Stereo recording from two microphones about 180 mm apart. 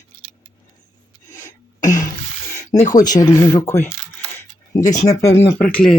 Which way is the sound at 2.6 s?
40° left (ahead or behind).